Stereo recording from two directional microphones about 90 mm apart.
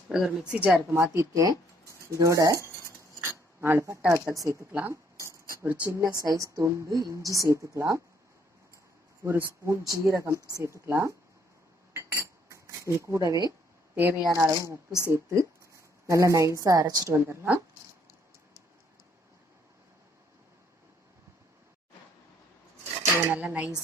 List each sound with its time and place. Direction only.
0.1 s a woman's voice: 10° right (ahead or behind)
0.9 s a woman's voice: 30° right (ahead or behind)
4.7 s speech: 20° right (ahead or behind)
5.1 s a sound: 35° right (ahead or behind)
5.6 s a woman's voice: 15° right (ahead or behind)
5.9 s a woman's voice: 40° right (ahead or behind)
9.2 s a woman's voice: 30° right (ahead or behind)
11.9 s cutlery: 30° right (ahead or behind)
13.9 s speech: 20° right (ahead or behind)
14.3 s a woman's voice: 35° right (ahead or behind)
17.1 s speech: 25° right (ahead or behind)
23.3 s a woman's voice: 15° right (ahead or behind)